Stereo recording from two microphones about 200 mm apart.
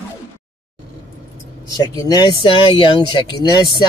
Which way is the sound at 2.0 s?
20° left (ahead or behind).